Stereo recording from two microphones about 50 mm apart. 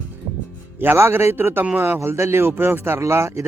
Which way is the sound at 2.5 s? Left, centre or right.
Right.